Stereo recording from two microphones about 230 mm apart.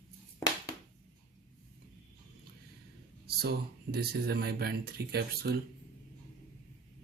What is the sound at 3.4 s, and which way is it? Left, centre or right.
Speech, right.